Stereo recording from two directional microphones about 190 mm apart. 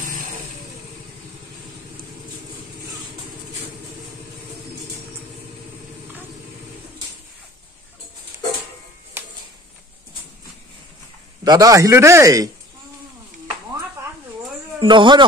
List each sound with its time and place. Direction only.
11.4 s a man's voice: 20° right (ahead or behind)
14.8 s speech: 25° right (ahead or behind)